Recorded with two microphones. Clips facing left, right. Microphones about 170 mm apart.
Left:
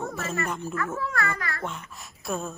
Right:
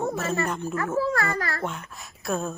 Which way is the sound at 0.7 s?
30° right (ahead or behind).